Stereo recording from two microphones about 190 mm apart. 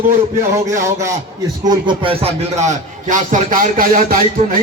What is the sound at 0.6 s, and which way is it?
Speech, 15° right (ahead or behind).